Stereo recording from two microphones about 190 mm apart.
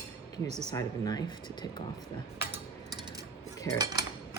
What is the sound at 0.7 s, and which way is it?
Speech, 20° left (ahead or behind).